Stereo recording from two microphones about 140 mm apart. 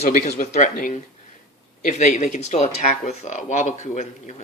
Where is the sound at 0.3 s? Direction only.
70° left (ahead or behind).